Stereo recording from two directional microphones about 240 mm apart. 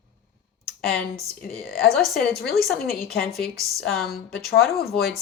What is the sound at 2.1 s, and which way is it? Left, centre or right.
Speech, left.